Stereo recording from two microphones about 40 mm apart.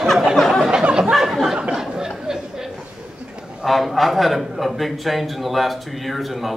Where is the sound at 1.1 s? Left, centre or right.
Centre.